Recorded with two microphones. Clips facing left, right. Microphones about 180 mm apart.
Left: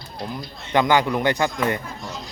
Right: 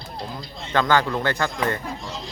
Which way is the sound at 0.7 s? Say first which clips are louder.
Left 2 dB; 15° left (ahead or behind).